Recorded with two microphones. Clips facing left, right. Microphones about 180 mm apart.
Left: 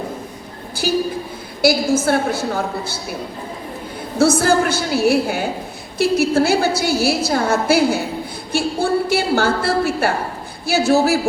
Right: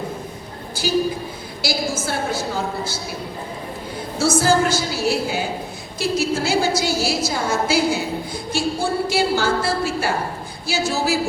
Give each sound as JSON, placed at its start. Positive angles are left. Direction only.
{"t": 0.8, "sound": "a woman's voice", "side_deg": 55}
{"t": 4.2, "sound": "a woman's voice", "side_deg": 60}